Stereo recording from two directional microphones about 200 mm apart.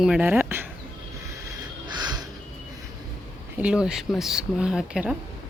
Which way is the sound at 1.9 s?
20° right (ahead or behind).